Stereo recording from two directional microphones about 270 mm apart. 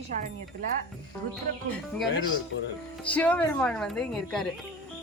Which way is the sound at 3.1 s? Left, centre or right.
Centre.